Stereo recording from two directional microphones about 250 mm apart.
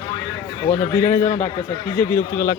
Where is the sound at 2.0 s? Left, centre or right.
Centre.